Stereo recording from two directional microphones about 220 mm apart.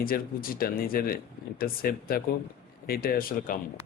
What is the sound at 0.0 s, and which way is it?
Speech, 40° left (ahead or behind).